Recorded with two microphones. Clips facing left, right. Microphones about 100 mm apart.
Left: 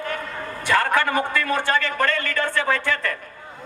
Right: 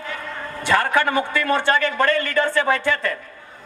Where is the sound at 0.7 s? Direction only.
20° right (ahead or behind).